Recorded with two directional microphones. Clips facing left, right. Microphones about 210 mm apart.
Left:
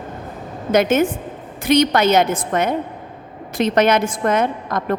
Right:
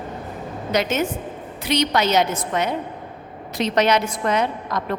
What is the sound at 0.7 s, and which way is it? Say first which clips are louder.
A woman's voice: left 6 dB; 50° left (ahead or behind).